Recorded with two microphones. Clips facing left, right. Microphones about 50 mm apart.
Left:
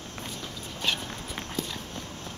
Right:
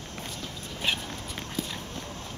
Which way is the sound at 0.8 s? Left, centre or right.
Centre.